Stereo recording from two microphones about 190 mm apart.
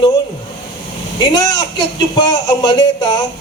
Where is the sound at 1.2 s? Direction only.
25° left (ahead or behind).